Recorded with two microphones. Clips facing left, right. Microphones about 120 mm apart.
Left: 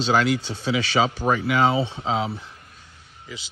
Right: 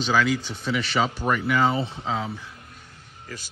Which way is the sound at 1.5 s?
85° left.